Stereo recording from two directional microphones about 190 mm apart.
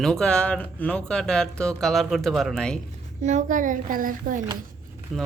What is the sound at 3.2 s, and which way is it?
A woman's voice, 40° right (ahead or behind).